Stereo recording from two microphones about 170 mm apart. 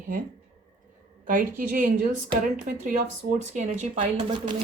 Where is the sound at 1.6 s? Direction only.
55° right (ahead or behind).